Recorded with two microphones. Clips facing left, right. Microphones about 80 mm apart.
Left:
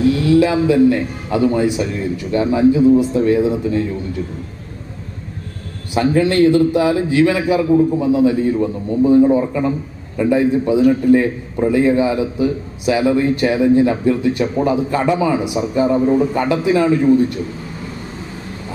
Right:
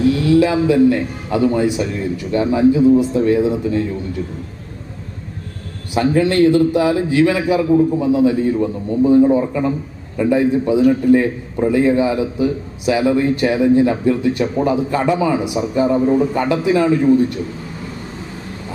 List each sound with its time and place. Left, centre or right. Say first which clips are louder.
0.3 s a man's voice: even; centre
5.9 s a man's voice: even; centre